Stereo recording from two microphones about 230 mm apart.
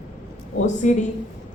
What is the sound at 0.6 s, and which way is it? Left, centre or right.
Speech, left.